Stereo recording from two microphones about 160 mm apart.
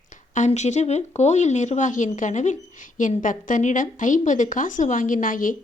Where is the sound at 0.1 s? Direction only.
50° left (ahead or behind).